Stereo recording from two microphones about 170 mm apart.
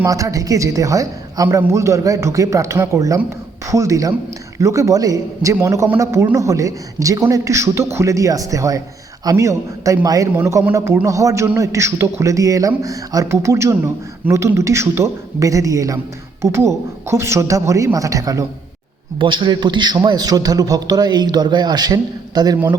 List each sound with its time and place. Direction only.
0.0 s a man's voice: 20° right (ahead or behind)